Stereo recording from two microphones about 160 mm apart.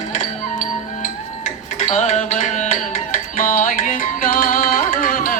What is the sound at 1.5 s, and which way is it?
Music, 50° left (ahead or behind).